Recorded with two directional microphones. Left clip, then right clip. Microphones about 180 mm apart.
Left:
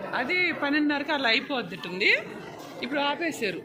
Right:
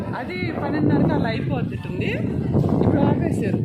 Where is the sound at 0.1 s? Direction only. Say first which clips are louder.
Left 5 dB; 25° right (ahead or behind).